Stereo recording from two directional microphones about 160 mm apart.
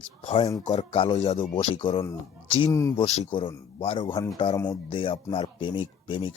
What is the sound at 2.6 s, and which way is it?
Speech, 20° left (ahead or behind).